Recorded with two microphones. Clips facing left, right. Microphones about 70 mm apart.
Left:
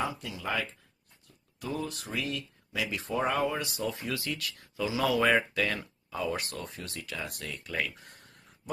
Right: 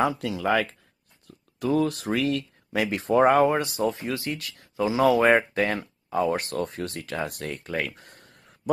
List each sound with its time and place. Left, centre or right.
0.0 s speech: right